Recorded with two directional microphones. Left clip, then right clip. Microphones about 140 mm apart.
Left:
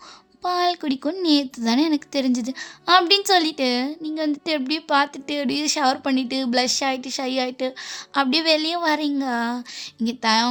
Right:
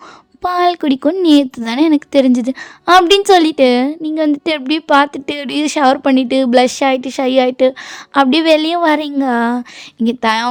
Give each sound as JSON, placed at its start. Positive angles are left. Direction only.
{"t": 0.4, "sound": "a woman's voice", "side_deg": -40}